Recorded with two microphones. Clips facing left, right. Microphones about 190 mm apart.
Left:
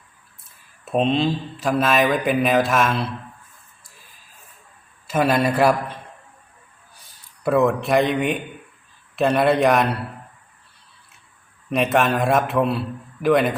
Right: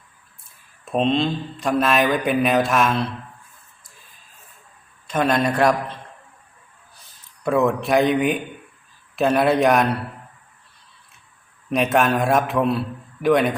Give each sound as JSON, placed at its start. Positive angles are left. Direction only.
{"t": 0.9, "sound": "speech", "side_deg": 5}
{"t": 5.0, "sound": "speech", "side_deg": 5}
{"t": 7.4, "sound": "speech", "side_deg": 0}
{"t": 11.7, "sound": "speech", "side_deg": 0}